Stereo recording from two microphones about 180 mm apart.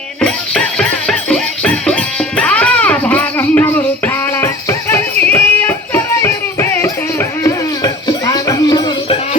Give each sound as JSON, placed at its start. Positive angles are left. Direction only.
{"t": 0.2, "sound": "music", "side_deg": 5}